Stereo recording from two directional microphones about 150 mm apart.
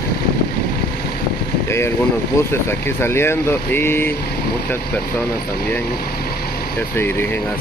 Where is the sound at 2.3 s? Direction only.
15° left (ahead or behind).